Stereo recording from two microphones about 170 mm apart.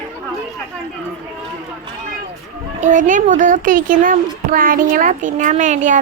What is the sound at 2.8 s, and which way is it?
A child's voice, 50° right (ahead or behind).